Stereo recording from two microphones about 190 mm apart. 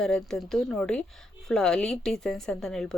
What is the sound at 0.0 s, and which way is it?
Speech, centre (ahead or behind).